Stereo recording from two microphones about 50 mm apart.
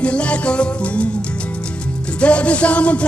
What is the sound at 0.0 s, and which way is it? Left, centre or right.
Music, left.